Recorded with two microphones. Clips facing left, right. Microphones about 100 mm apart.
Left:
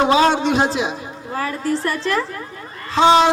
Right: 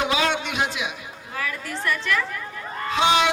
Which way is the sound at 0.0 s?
35° left (ahead or behind).